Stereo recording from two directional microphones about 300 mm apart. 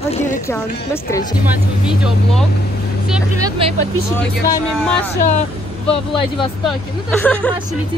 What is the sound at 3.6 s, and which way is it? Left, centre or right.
Speech, centre.